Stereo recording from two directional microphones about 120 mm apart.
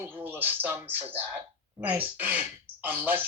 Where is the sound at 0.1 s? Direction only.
15° right (ahead or behind).